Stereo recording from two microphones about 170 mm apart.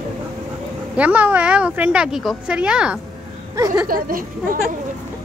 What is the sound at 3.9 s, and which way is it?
Speech, 55° right (ahead or behind).